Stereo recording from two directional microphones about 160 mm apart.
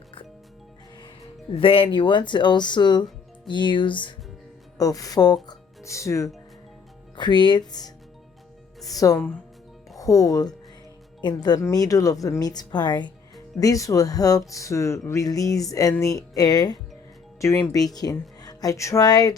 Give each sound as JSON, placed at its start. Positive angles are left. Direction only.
{"t": 1.5, "sound": "speech", "side_deg": 35}
{"t": 9.1, "sound": "speech", "side_deg": 10}
{"t": 10.0, "sound": "speech", "side_deg": 20}